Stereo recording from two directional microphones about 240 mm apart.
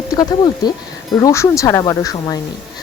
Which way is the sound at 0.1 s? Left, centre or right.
Centre.